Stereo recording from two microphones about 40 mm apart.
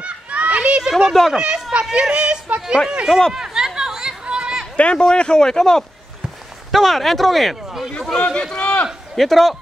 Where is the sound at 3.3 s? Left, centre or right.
Centre.